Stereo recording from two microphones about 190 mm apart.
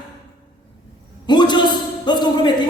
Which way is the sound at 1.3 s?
25° left (ahead or behind).